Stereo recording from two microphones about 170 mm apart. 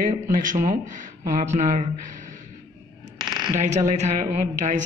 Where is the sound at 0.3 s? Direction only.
50° right (ahead or behind).